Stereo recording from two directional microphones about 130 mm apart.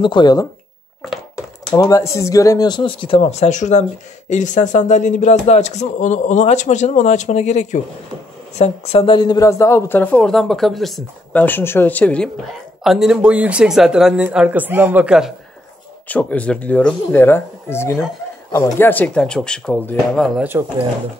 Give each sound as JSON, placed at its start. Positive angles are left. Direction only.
{"t": 0.0, "sound": "speech", "side_deg": 35}
{"t": 1.8, "sound": "speech", "side_deg": 25}
{"t": 11.4, "sound": "speech", "side_deg": 15}
{"t": 12.8, "sound": "speech", "side_deg": -5}
{"t": 16.1, "sound": "speech", "side_deg": 10}